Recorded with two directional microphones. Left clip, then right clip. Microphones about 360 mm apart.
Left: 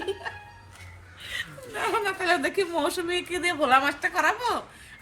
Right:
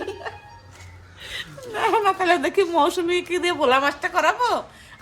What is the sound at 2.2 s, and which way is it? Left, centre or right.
Speech, centre.